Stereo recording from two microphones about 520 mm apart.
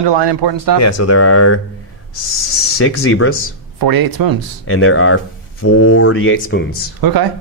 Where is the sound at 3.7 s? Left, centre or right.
Right.